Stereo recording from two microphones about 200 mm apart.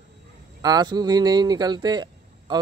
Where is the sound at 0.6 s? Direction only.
20° right (ahead or behind).